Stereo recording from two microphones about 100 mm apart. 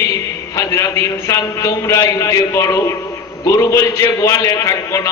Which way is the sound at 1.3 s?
30° left (ahead or behind).